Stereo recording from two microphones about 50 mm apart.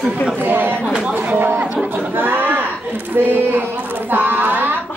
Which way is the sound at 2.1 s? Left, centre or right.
Right.